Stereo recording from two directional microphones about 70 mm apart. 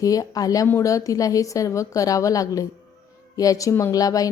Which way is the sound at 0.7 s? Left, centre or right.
Left.